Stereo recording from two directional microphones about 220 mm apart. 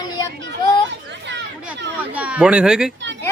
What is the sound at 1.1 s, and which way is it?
Children playing, 55° right (ahead or behind).